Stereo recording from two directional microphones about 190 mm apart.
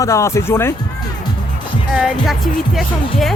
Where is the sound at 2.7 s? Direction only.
Centre (ahead or behind).